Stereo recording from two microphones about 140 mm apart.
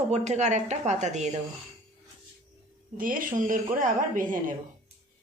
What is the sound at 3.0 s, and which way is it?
Speech, 75° right (ahead or behind).